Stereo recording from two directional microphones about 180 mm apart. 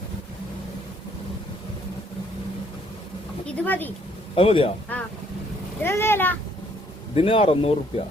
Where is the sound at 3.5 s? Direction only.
10° left (ahead or behind).